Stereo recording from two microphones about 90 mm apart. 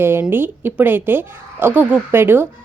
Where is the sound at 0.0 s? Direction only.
25° right (ahead or behind).